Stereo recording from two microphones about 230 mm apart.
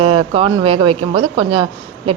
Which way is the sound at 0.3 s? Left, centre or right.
Right.